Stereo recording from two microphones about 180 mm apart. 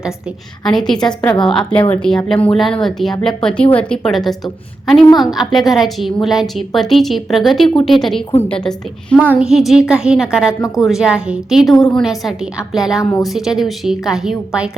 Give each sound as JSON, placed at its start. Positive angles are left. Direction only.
{"t": 0.6, "sound": "a woman's voice", "side_deg": 0}
{"t": 13.0, "sound": "a woman's voice", "side_deg": 20}
{"t": 13.2, "sound": "a woman's voice", "side_deg": 0}